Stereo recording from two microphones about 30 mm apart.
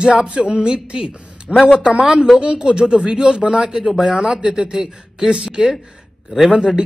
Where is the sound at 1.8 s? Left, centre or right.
Right.